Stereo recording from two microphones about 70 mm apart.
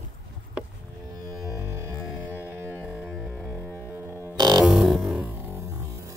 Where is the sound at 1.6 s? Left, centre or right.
Right.